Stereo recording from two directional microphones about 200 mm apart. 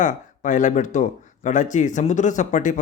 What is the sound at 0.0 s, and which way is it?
Speech, 40° left (ahead or behind).